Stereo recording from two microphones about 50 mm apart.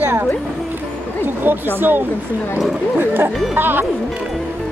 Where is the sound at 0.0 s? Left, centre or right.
Right.